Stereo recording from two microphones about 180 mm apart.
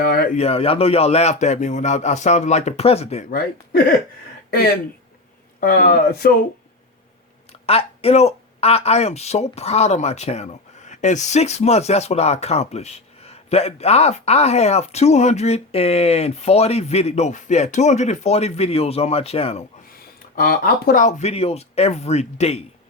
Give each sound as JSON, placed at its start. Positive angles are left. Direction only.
{"t": 0.0, "sound": "a sound", "side_deg": 55}
{"t": 0.3, "sound": "speech", "side_deg": 35}
{"t": 3.2, "sound": "speech", "side_deg": 55}
{"t": 5.5, "sound": "speech", "side_deg": 55}
{"t": 7.5, "sound": "speech", "side_deg": 35}
{"t": 20.3, "sound": "speech", "side_deg": 55}